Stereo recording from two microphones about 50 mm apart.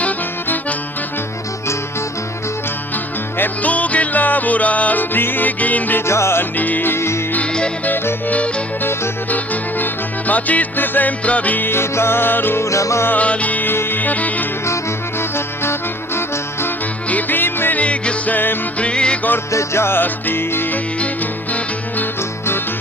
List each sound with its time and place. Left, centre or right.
3.3 s music: left
6.1 s music: left
6.6 s music: left
6.9 s music: left
8.3 s music: left
11.7 s music: left
12.6 s music: left
13.1 s music: left
13.7 s music: left
16.1 s music: left
17.1 s music: left
17.7 s music: left
19.5 s music: left
20.0 s music: left